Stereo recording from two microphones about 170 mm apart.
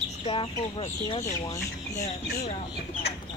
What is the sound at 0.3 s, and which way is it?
Speech, 30° left (ahead or behind).